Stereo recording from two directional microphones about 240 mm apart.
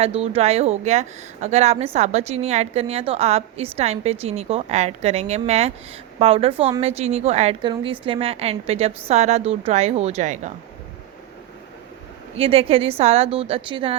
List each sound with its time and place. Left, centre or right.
0.0 s speech: right
12.4 s speech: right